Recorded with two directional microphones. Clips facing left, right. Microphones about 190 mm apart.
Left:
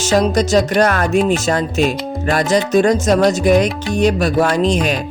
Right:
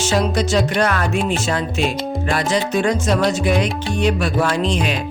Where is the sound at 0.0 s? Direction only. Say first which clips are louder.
Left 4 dB; 40° left (ahead or behind).